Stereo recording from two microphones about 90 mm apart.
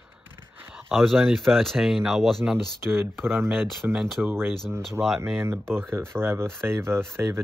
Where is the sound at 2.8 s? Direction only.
25° right (ahead or behind).